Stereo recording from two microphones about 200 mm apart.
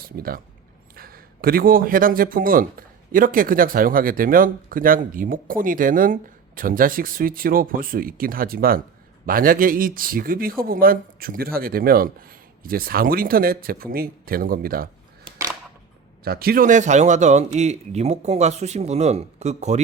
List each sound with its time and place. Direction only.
0.2 s a man's voice: 45° right (ahead or behind)
16.2 s a man's voice: 50° right (ahead or behind); by 19.8 s 35° right (ahead or behind)